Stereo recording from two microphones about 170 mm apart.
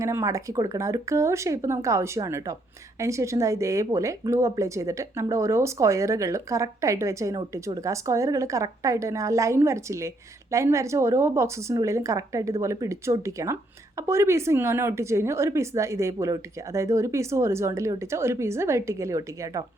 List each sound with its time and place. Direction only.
0.0 s a woman's voice: 15° right (ahead or behind)